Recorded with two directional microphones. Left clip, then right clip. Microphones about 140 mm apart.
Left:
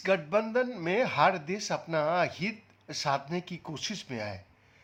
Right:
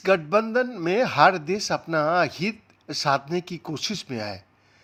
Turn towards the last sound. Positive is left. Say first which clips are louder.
# right 6 dB
turn(degrees=-40)  # may be behind; listen again after turning